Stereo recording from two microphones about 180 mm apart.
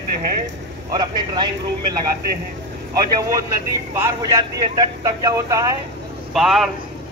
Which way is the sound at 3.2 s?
20° right (ahead or behind).